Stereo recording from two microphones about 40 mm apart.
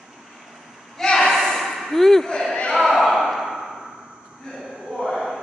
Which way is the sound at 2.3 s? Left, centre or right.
Centre.